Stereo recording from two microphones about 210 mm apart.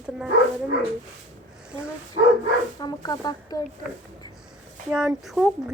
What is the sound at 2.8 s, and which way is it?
Speech, 20° left (ahead or behind).